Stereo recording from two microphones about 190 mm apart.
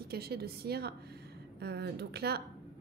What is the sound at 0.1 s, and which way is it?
Speech, 55° right (ahead or behind).